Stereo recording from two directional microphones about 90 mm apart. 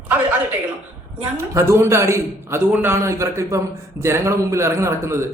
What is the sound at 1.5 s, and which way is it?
A man's voice, 30° right (ahead or behind).